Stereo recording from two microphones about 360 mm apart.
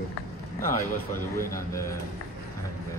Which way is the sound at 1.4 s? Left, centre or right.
Centre.